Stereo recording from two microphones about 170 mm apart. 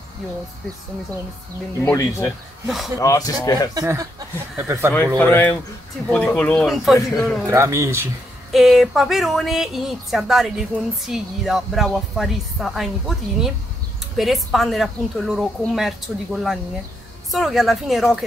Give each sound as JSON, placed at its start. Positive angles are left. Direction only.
{"t": 1.8, "sound": "speech", "side_deg": 15}
{"t": 2.6, "sound": "a woman's voice", "side_deg": 0}
{"t": 3.0, "sound": "a man's voice", "side_deg": 20}
{"t": 3.7, "sound": "speech", "side_deg": -20}
{"t": 5.2, "sound": "a woman's voice", "side_deg": 10}
{"t": 7.4, "sound": "speech", "side_deg": -15}
{"t": 8.5, "sound": "a woman's voice", "side_deg": 0}